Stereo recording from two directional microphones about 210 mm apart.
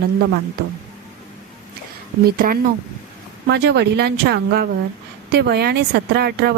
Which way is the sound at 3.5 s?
55° right (ahead or behind).